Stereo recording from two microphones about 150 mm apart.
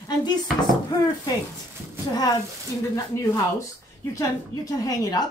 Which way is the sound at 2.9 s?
20° left (ahead or behind).